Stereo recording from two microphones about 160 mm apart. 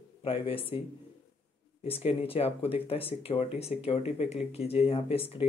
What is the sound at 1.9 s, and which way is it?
A man's voice, 40° left (ahead or behind).